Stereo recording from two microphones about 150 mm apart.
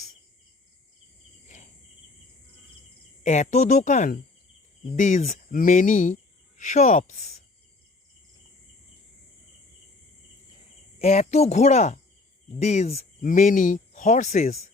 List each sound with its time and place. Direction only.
3.2 s speech: 50° left (ahead or behind)
11.0 s speech: 45° left (ahead or behind)
13.2 s speech: 60° left (ahead or behind)